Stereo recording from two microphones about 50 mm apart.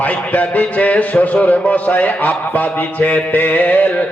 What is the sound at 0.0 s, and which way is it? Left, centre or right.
A man's voice, left.